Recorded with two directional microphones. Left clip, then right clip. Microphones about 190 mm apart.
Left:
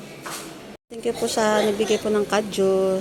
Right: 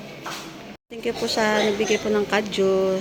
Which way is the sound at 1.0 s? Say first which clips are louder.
Left 1 dB; 10° left (ahead or behind).